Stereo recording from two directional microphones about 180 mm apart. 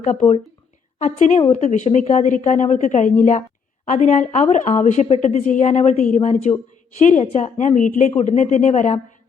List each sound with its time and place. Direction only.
0.0 s a woman's voice: 40° left (ahead or behind)